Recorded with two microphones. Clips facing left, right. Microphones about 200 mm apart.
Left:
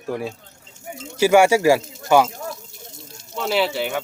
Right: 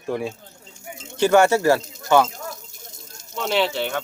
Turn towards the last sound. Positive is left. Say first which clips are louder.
# left 1 dB
turn(degrees=10)  # may be behind; listen again after turning